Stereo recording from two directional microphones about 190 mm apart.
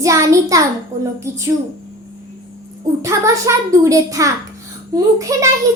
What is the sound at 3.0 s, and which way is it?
A woman's voice, 15° right (ahead or behind).